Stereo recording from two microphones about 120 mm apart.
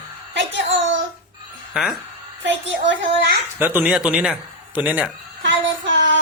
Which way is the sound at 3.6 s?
15° right (ahead or behind).